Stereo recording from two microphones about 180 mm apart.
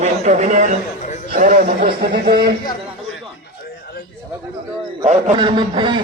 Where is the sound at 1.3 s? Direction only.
45° right (ahead or behind).